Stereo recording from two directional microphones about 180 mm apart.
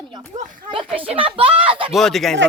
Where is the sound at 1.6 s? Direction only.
30° right (ahead or behind).